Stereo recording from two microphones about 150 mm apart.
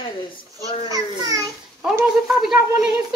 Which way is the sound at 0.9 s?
25° right (ahead or behind).